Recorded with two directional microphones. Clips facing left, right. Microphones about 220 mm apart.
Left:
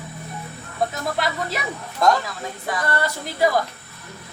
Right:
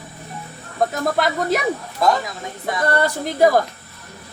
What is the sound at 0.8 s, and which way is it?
Speech, 45° right (ahead or behind).